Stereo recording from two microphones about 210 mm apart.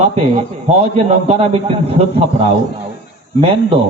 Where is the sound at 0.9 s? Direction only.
30° right (ahead or behind).